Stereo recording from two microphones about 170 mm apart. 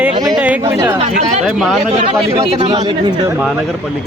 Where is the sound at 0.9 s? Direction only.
40° right (ahead or behind).